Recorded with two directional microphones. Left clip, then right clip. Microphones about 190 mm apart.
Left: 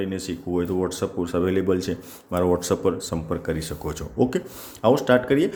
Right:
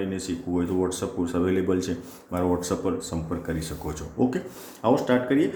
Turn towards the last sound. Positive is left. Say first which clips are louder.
# left 3 dB
turn(degrees=55)  # may be behind; listen again after turning